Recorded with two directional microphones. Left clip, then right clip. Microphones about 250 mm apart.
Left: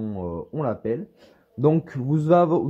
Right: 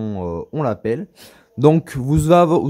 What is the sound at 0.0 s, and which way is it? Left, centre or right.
A man's voice, right.